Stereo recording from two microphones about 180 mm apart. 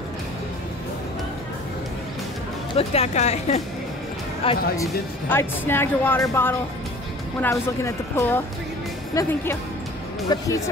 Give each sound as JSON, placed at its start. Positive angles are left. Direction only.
{"t": 2.7, "sound": "a woman's voice", "side_deg": 35}
{"t": 5.3, "sound": "speech", "side_deg": 10}